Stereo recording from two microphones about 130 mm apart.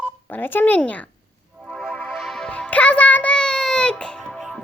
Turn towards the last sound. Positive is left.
turn(degrees=5)  # may be behind; listen again after turning